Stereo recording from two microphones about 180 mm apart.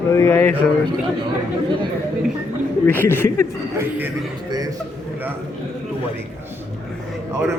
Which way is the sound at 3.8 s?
10° right (ahead or behind).